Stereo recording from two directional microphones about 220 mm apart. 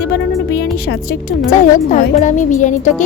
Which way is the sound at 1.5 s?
35° left (ahead or behind).